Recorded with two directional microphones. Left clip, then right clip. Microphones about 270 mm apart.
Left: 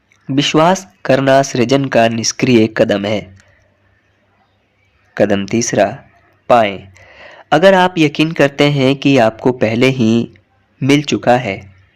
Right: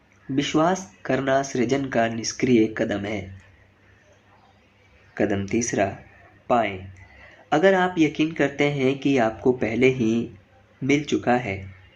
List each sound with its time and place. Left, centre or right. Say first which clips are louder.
0.3 s speech: left 10 dB; left
5.1 s speech: left 10 dB; left